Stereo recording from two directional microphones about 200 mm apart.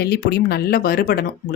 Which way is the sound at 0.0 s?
55° left (ahead or behind).